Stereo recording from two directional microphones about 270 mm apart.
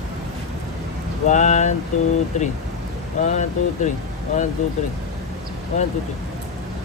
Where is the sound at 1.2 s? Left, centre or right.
Left.